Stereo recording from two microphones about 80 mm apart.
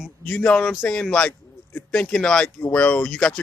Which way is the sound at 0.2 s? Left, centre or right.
Centre.